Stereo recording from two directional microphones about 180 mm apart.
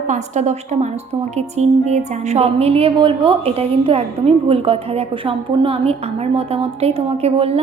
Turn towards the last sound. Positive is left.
turn(degrees=-35)  # may be behind; listen again after turning